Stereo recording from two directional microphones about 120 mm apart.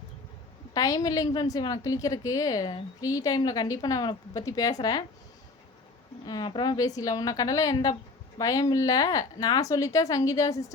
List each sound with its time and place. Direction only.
0.7 s a woman's voice: 30° left (ahead or behind)
6.2 s a woman's voice: 40° left (ahead or behind)